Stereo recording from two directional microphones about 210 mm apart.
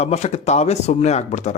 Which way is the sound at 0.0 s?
30° left (ahead or behind).